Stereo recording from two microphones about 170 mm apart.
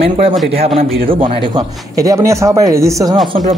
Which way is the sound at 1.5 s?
20° right (ahead or behind).